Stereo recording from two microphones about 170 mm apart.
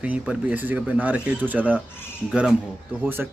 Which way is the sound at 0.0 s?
10° right (ahead or behind).